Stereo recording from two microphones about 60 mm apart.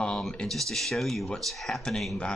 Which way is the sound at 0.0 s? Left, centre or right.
Centre.